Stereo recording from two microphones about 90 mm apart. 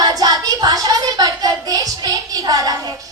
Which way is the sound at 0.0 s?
45° right (ahead or behind).